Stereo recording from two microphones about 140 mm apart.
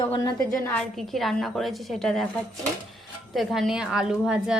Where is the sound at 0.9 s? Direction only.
Centre (ahead or behind).